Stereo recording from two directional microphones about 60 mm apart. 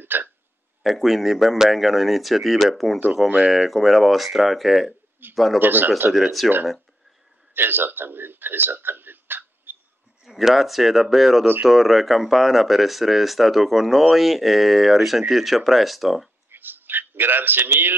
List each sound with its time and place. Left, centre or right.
0.0 s hiccup: right
0.8 s speech: centre
5.6 s speech: right
6.1 s speech: centre
7.5 s speech: right
10.2 s speech: centre
16.4 s a sound: right